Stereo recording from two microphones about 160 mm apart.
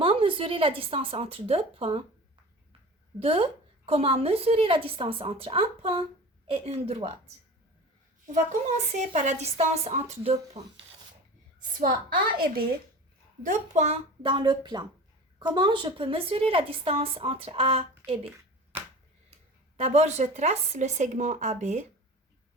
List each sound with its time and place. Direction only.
0.0 s a woman's voice: 35° right (ahead or behind)
3.2 s speech: 35° right (ahead or behind)
8.9 s speech: 50° right (ahead or behind)
11.8 s a woman's voice: 60° right (ahead or behind)
13.4 s speech: 50° right (ahead or behind)
19.7 s speech: 40° right (ahead or behind)